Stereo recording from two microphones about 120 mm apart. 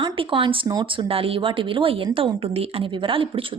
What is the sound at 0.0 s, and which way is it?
A woman's voice, 45° right (ahead or behind).